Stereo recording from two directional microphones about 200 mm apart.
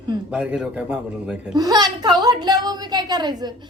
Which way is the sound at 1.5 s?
20° right (ahead or behind).